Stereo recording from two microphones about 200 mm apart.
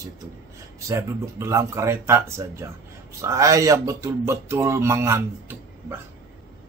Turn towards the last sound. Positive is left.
turn(degrees=-10)  # may be behind; listen again after turning